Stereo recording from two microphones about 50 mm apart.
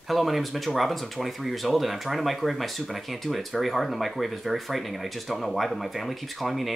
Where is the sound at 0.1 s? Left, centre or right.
Centre.